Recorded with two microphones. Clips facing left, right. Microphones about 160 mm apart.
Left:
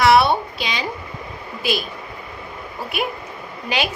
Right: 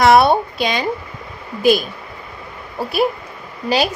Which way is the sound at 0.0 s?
45° right (ahead or behind).